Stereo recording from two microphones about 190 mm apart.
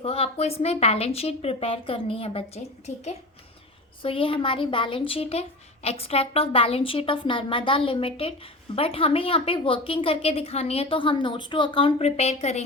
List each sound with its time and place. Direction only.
0.0 s a woman's voice: 30° left (ahead or behind)